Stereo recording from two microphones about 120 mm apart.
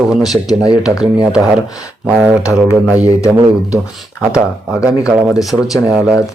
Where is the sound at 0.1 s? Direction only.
5° right (ahead or behind).